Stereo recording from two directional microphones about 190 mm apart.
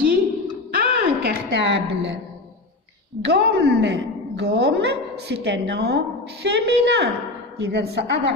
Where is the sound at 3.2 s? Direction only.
65° right (ahead or behind).